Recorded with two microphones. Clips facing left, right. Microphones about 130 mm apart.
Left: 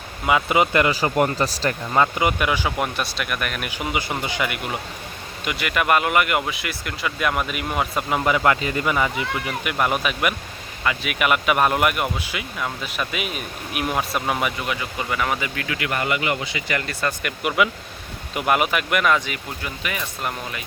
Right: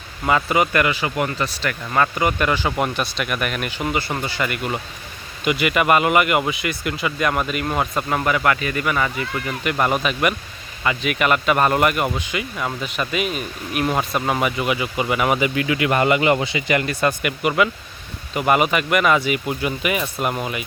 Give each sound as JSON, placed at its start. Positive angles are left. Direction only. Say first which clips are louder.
{"t": 0.4, "sound": "speech", "louder": "even", "side_deg": 20}
{"t": 0.9, "sound": "speech", "louder": "left 2 dB", "side_deg": 35}
{"t": 1.9, "sound": "speech", "louder": "right 1 dB", "side_deg": 20}
{"t": 3.7, "sound": "speech", "louder": "right 2 dB", "side_deg": 10}
{"t": 8.2, "sound": "speech", "louder": "left 1 dB", "side_deg": 20}
{"t": 9.6, "sound": "speech", "louder": "right 3 dB", "side_deg": 5}
{"t": 18.3, "sound": "speech", "louder": "right 3 dB", "side_deg": 0}